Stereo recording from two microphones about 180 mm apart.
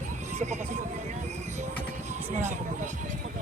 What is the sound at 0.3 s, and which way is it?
Speech, 40° right (ahead or behind).